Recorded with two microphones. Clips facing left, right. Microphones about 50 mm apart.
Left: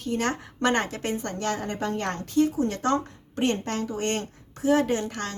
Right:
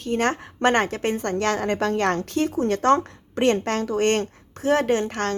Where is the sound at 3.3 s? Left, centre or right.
Right.